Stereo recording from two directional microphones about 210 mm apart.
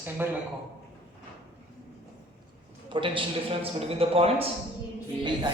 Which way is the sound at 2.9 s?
25° right (ahead or behind).